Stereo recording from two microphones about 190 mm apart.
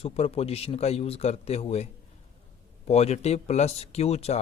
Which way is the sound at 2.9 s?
35° left (ahead or behind).